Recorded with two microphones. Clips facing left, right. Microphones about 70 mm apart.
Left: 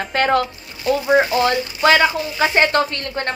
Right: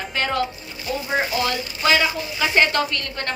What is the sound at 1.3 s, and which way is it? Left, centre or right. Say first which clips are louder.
Speech: left 6 dB; left.